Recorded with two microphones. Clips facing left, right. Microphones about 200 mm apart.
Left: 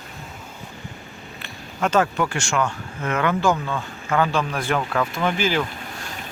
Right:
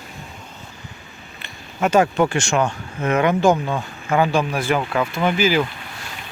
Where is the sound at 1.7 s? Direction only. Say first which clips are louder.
Right 4 dB; 10° right (ahead or behind).